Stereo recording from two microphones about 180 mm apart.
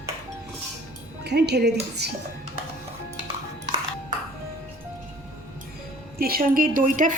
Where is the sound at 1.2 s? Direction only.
65° right (ahead or behind).